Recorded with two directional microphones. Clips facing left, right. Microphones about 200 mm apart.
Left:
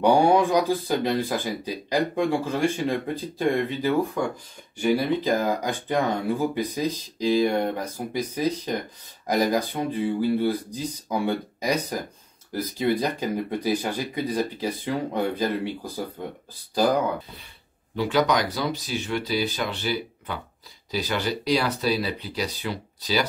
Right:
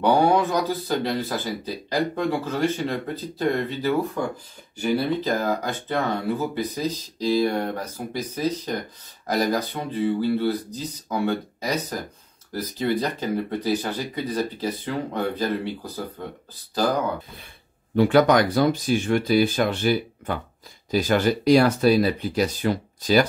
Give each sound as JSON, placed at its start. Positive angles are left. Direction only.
{"t": 0.0, "sound": "speech", "side_deg": 15}
{"t": 5.2, "sound": "speech", "side_deg": 10}
{"t": 17.9, "sound": "speech", "side_deg": -50}